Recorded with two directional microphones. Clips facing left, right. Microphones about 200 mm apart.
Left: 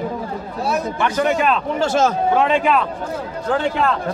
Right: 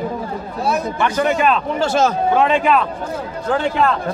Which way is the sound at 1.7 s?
50° left (ahead or behind).